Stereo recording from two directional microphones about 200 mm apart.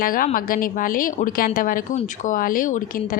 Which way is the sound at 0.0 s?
45° left (ahead or behind).